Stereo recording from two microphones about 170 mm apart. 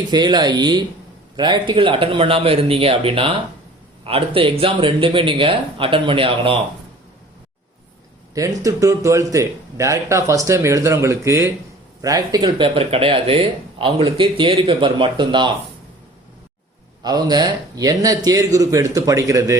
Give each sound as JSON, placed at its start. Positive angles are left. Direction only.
{"t": 0.1, "sound": "speech", "side_deg": -25}
{"t": 8.4, "sound": "speech", "side_deg": -20}
{"t": 17.0, "sound": "speech", "side_deg": -25}